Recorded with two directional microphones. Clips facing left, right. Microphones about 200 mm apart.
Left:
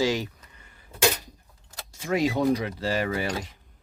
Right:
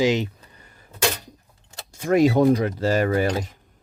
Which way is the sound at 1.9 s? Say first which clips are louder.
Right 7 dB; 50° right (ahead or behind).